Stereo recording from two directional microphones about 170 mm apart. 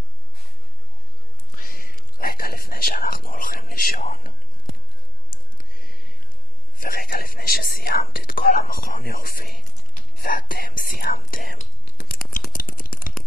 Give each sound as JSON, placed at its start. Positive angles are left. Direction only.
{"t": 1.6, "sound": "speech", "side_deg": 55}
{"t": 5.6, "sound": "music", "side_deg": 60}
{"t": 6.8, "sound": "speech", "side_deg": 60}
{"t": 12.1, "sound": "scissors", "side_deg": 60}
{"t": 12.5, "sound": "a sound", "side_deg": 55}